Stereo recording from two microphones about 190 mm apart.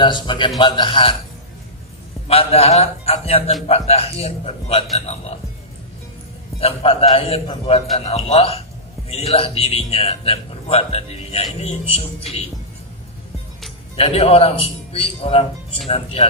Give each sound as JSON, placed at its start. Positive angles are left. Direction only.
{"t": 0.0, "sound": "a man's voice", "side_deg": 25}
{"t": 2.2, "sound": "a man's voice", "side_deg": 30}
{"t": 6.6, "sound": "a man's voice", "side_deg": 30}
{"t": 13.9, "sound": "a man's voice", "side_deg": 30}